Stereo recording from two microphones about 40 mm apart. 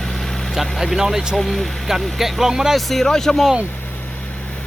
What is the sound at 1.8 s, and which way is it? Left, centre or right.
Speech, centre.